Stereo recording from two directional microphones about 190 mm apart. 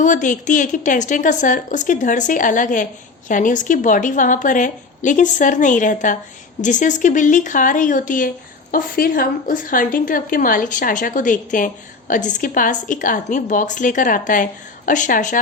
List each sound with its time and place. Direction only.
0.0 s a woman's voice: 40° left (ahead or behind)